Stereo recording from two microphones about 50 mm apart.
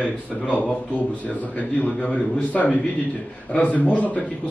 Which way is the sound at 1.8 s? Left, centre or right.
Left.